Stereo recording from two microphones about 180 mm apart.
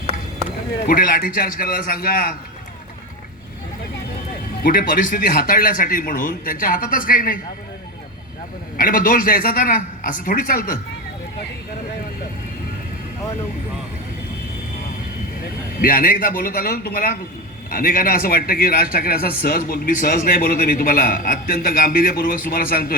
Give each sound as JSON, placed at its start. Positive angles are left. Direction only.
{"t": 0.9, "sound": "a man's voice", "side_deg": 55}
{"t": 4.6, "sound": "a man's voice", "side_deg": 55}
{"t": 8.8, "sound": "a man's voice", "side_deg": 50}
{"t": 15.8, "sound": "a man's voice", "side_deg": 50}